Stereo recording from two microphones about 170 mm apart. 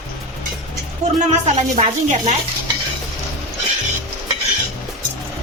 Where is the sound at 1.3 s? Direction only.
40° right (ahead or behind).